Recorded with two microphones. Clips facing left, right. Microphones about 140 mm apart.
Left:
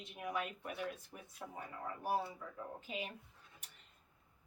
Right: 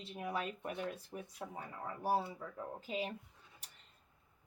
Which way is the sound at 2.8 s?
35° right (ahead or behind).